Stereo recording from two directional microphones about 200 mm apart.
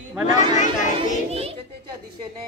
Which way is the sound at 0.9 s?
30° right (ahead or behind).